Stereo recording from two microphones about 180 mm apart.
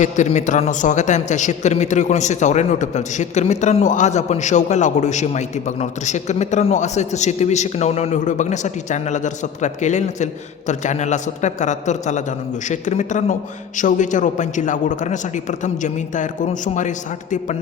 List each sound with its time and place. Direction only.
0.0 s a man's voice: 40° left (ahead or behind)